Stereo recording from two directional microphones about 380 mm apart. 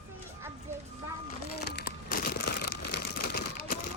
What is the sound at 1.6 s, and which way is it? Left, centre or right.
Crumpling, left.